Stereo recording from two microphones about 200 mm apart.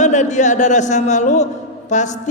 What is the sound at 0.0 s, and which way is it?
A man's voice, 35° left (ahead or behind).